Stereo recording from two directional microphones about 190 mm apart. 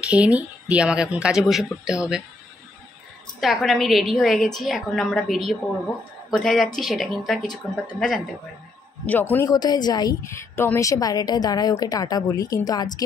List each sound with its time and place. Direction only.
0.1 s speech: 5° right (ahead or behind)
3.3 s speech: centre (ahead or behind)
9.0 s a man's voice: 10° left (ahead or behind)
9.5 s a woman's voice: 20° left (ahead or behind)